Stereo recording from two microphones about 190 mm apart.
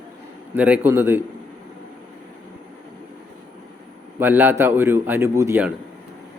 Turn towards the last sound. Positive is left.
turn(degrees=-10)  # may be behind; listen again after turning